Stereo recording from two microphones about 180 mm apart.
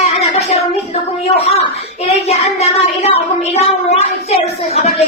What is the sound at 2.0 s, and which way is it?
Speech, 35° left (ahead or behind).